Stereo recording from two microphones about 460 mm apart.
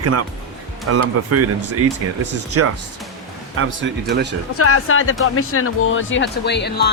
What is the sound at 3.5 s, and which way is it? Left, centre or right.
Speech, right.